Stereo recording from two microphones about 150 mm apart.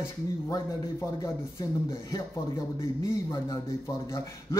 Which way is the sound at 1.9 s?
20° left (ahead or behind).